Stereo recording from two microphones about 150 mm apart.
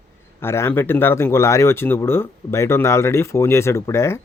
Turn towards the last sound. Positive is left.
turn(degrees=20)  # may be behind; listen again after turning